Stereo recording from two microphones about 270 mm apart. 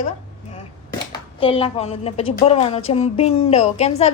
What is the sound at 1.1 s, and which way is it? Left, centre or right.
A woman's voice, centre.